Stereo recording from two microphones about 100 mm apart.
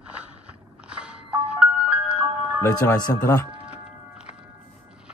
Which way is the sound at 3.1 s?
25° left (ahead or behind).